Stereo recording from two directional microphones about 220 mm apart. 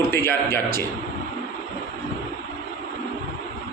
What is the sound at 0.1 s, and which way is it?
Speech, 10° left (ahead or behind).